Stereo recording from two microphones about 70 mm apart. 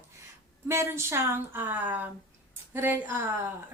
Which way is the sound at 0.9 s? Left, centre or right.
Right.